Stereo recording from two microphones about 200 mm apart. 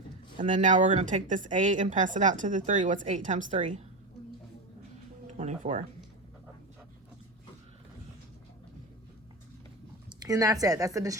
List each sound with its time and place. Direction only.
0.4 s speech: 40° right (ahead or behind)
5.4 s speech: 35° right (ahead or behind)
10.1 s speech: 20° right (ahead or behind)